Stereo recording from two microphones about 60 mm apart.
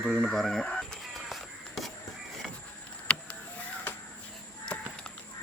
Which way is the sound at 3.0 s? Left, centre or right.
Left.